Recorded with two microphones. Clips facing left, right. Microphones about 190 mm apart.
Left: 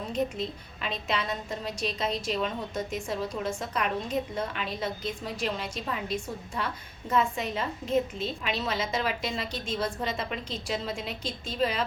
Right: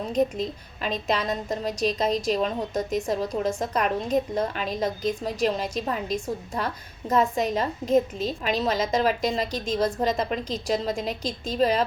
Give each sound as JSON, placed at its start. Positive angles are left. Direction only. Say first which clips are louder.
{"t": 0.1, "sound": "a woman's voice", "louder": "right 6 dB", "side_deg": -40}